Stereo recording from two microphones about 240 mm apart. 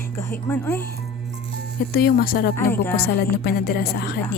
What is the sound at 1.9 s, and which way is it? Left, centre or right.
Speech, left.